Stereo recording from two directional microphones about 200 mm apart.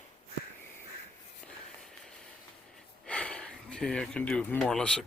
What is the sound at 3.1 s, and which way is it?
Speech, 5° left (ahead or behind).